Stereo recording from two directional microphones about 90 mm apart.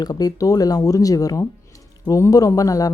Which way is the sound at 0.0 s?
45° left (ahead or behind).